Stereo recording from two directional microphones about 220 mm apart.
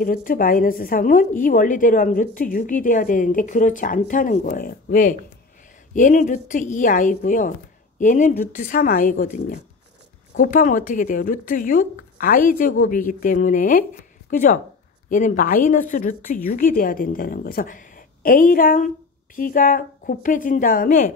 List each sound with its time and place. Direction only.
0.0 s a woman's voice: 40° left (ahead or behind)